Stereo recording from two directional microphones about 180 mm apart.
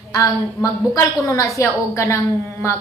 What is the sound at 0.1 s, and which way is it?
A woman's voice, 20° left (ahead or behind).